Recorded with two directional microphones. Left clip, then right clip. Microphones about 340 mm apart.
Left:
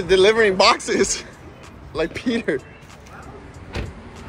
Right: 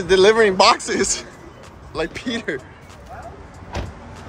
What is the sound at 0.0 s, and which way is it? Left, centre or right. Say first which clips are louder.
Speech: right 1 dB; centre.